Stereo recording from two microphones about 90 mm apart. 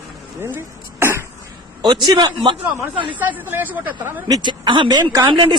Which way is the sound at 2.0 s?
45° right (ahead or behind).